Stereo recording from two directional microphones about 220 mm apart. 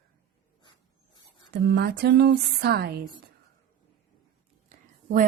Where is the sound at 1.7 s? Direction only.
50° right (ahead or behind).